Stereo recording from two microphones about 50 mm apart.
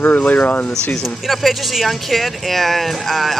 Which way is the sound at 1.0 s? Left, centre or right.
Centre.